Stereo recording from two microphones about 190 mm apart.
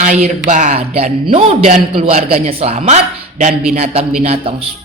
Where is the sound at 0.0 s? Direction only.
40° right (ahead or behind).